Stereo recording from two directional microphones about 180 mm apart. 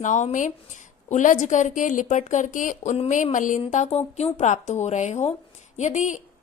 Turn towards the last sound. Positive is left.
turn(degrees=40)  # may be behind; listen again after turning